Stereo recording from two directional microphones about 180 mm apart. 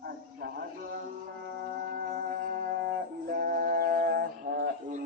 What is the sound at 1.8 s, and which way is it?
Music, 50° right (ahead or behind).